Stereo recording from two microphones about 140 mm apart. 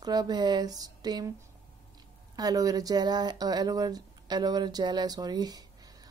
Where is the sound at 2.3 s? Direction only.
25° right (ahead or behind).